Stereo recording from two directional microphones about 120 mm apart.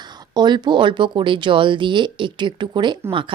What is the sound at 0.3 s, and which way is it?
A woman's voice, 35° right (ahead or behind).